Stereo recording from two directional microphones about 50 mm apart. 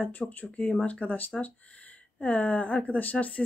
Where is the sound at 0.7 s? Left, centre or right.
Left.